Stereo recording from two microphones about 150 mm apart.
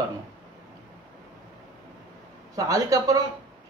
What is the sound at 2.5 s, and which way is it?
Speech, 25° right (ahead or behind).